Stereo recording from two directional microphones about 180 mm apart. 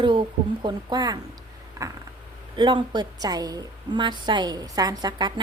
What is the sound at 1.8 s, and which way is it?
Creak, 20° right (ahead or behind).